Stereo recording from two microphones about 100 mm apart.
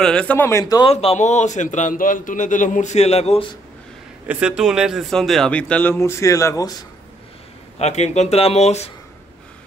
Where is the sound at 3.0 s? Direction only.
90° left.